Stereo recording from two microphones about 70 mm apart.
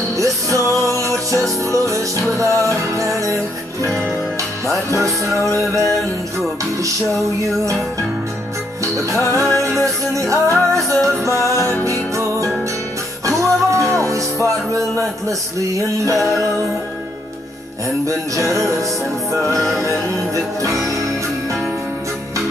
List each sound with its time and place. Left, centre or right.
0.2 s music: right
4.9 s music: right
8.8 s music: right
13.4 s music: right
18.0 s music: right